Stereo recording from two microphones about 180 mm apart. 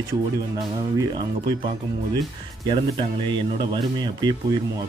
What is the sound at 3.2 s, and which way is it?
Speech, 25° right (ahead or behind).